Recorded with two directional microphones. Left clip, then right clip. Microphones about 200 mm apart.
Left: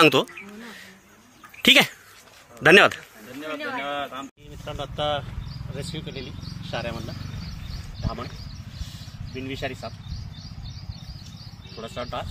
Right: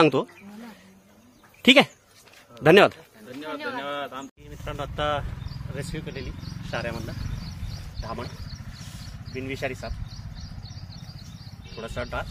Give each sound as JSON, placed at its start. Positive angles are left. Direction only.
{"t": 0.0, "sound": "speech", "side_deg": -5}
{"t": 1.6, "sound": "speech", "side_deg": 0}
{"t": 3.4, "sound": "speech", "side_deg": -20}
{"t": 4.6, "sound": "speech", "side_deg": 0}
{"t": 9.3, "sound": "speech", "side_deg": -10}
{"t": 11.7, "sound": "speech", "side_deg": -5}